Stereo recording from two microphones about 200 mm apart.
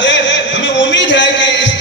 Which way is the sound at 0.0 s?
65° left (ahead or behind).